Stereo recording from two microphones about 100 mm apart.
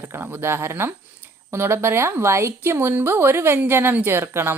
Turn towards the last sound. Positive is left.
turn(degrees=-20)  # may be behind; listen again after turning